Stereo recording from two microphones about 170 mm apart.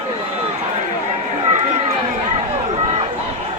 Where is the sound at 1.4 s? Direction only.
45° right (ahead or behind).